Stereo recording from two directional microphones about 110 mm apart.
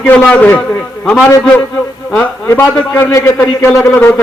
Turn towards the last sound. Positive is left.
turn(degrees=20)  # may be behind; listen again after turning